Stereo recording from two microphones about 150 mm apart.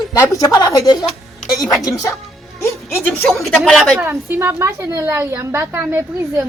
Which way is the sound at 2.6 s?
20° left (ahead or behind).